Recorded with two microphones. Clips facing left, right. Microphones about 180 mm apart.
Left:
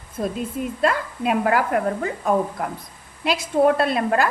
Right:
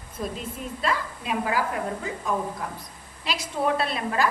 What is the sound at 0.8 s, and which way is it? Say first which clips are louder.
A woman's voice: left 6 dB; 55° left (ahead or behind).